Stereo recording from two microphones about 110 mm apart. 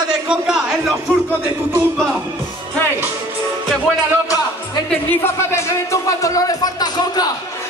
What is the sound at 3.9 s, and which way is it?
Speech, centre (ahead or behind).